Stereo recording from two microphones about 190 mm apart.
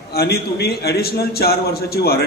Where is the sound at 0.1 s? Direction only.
55° left (ahead or behind).